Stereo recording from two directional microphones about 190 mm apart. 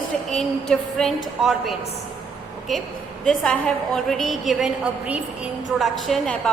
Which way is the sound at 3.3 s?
5° left (ahead or behind).